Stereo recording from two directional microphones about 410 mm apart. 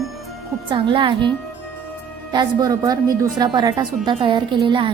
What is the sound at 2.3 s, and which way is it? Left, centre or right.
Speech, centre.